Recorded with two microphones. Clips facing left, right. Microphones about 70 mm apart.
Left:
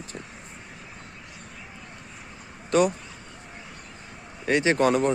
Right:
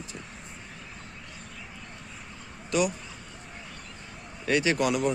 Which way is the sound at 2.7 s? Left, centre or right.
Left.